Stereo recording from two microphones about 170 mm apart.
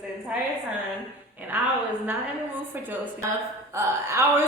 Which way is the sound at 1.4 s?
10° right (ahead or behind).